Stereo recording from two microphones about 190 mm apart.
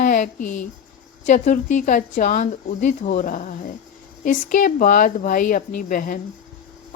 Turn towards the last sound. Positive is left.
turn(degrees=45)  # may be behind; listen again after turning